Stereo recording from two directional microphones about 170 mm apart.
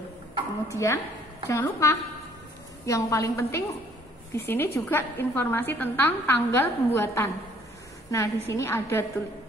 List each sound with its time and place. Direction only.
0.7 s a woman's voice: 15° left (ahead or behind)